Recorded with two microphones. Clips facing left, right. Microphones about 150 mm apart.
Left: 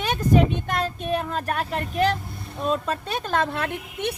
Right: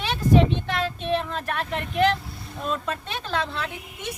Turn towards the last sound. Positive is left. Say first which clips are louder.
# left 6 dB
turn(degrees=60)  # may be behind; listen again after turning